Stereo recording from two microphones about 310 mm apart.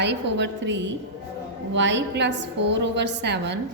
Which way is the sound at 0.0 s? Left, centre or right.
Right.